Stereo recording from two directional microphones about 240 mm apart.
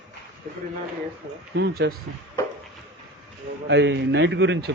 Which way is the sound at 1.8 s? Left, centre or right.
Right.